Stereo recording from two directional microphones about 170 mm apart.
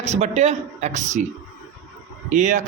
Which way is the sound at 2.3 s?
45° right (ahead or behind).